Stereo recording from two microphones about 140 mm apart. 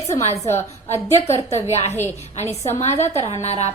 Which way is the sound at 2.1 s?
50° left (ahead or behind).